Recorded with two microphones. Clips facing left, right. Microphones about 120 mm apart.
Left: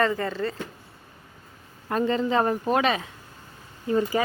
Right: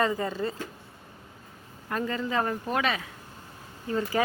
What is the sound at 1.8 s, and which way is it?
A woman's voice, 25° left (ahead or behind).